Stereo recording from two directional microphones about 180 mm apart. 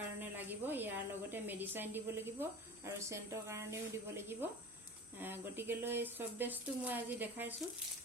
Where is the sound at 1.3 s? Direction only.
10° right (ahead or behind).